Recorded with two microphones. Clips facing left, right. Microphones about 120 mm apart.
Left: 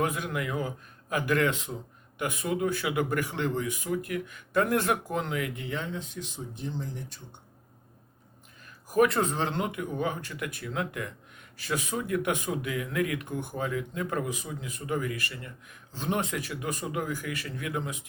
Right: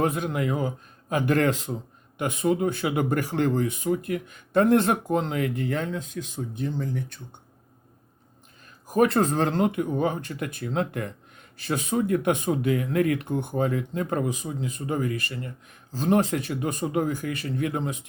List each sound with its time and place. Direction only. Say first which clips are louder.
0.0 s speech: right 5 dB; 30° right (ahead or behind); by 7.2 s 55° right (ahead or behind)
9.0 s speech: right 3 dB; 35° right (ahead or behind)
14.3 s speech: right 6 dB; 25° right (ahead or behind)